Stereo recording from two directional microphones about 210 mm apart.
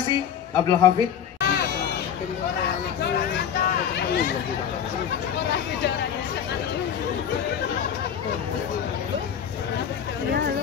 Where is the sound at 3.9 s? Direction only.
50° left (ahead or behind).